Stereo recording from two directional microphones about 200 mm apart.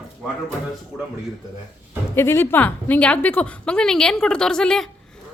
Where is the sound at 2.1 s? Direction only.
10° left (ahead or behind).